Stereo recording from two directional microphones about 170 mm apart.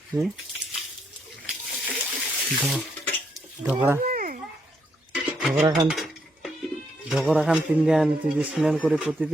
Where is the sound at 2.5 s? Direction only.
Centre (ahead or behind).